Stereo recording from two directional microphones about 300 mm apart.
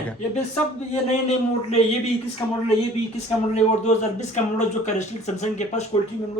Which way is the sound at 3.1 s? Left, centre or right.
Left.